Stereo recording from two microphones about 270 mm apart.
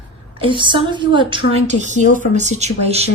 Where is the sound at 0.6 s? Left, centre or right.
Centre.